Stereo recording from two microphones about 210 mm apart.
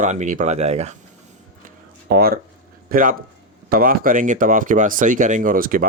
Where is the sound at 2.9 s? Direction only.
40° right (ahead or behind).